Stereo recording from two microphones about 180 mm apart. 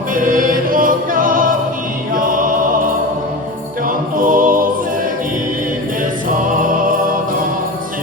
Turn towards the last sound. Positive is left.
turn(degrees=-50)  # may be behind; listen again after turning